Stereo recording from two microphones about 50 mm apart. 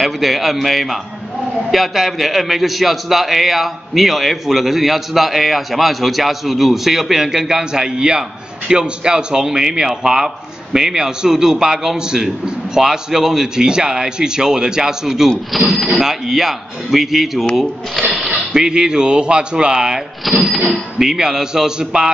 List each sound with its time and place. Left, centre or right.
0.0 s a man's voice: centre
18.1 s a sound: centre
18.5 s a man's voice: centre
20.4 s a man's voice: centre